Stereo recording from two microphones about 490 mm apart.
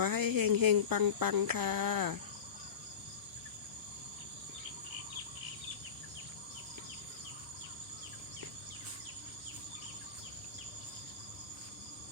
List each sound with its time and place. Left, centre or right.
0.0 s speech: right